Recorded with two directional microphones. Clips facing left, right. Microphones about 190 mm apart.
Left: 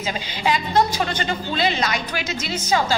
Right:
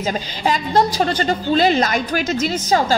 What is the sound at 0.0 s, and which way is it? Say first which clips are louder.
A woman's voice: right 3 dB; 40° right (ahead or behind).